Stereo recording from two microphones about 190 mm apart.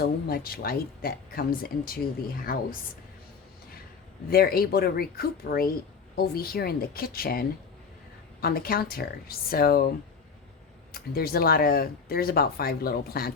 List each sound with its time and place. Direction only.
0.0 s speech: 50° left (ahead or behind)
4.3 s speech: 50° left (ahead or behind)
10.9 s speech: 50° left (ahead or behind)